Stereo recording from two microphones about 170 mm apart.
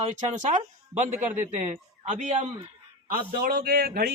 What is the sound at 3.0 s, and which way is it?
A man's voice, 60° right (ahead or behind).